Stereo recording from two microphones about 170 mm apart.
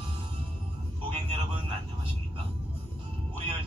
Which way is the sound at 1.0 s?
30° right (ahead or behind).